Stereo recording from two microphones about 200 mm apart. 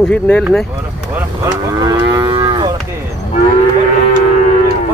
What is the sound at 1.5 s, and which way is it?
Moo, 20° right (ahead or behind).